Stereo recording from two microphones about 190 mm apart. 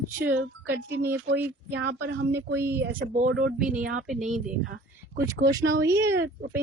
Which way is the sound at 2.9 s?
50° right (ahead or behind).